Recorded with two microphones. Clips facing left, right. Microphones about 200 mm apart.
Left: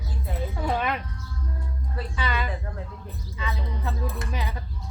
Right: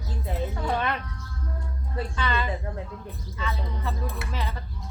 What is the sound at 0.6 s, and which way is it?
Speech, 10° left (ahead or behind).